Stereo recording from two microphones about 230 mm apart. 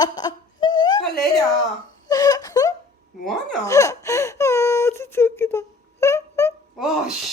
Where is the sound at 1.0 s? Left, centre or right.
Left.